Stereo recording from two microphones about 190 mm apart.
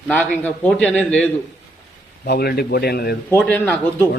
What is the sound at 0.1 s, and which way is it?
A man's voice, 5° left (ahead or behind).